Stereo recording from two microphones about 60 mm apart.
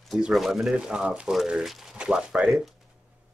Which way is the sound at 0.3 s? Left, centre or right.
Centre.